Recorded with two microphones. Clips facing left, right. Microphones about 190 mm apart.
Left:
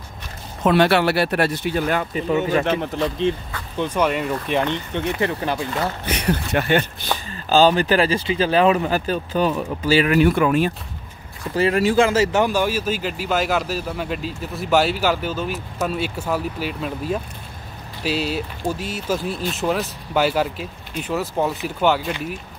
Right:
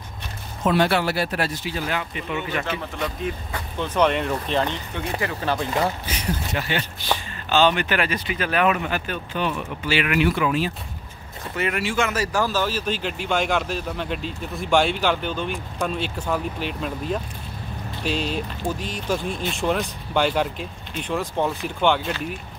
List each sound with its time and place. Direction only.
0.7 s speech: 70° left (ahead or behind); by 2.6 s 40° left (ahead or behind)
3.0 s speech: 25° left (ahead or behind)
3.7 s speech: 10° left (ahead or behind)
4.6 s speech: 20° left (ahead or behind)
6.0 s speech: 65° left (ahead or behind)
7.4 s speech: 35° left (ahead or behind)
11.5 s speech: 35° left (ahead or behind); by 22.1 s 5° left (ahead or behind)